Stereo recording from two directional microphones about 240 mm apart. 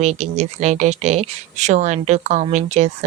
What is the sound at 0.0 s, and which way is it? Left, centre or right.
Speech, right.